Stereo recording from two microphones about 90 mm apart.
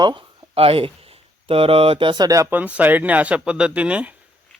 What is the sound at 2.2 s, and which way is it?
Speech, 40° right (ahead or behind).